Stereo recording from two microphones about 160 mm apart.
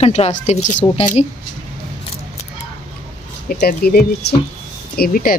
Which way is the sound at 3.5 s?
75° left (ahead or behind).